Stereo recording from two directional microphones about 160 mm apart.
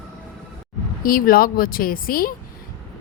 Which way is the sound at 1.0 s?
60° left (ahead or behind).